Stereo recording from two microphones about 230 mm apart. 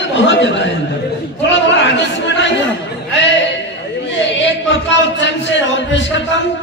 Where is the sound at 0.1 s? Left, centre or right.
Left.